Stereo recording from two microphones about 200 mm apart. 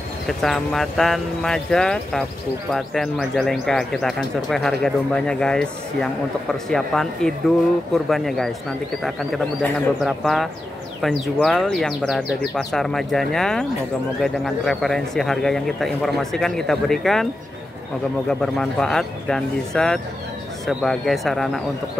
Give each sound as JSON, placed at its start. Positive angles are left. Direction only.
{"t": 0.3, "sound": "speech", "side_deg": 0}
{"t": 18.3, "sound": "speech", "side_deg": 5}